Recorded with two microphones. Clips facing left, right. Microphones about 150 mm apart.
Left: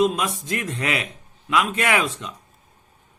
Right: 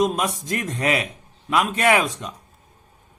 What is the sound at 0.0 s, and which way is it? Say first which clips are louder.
A man's voice: left 1 dB; 45° right (ahead or behind).